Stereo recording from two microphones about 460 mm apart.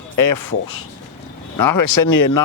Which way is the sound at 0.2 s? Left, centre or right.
Left.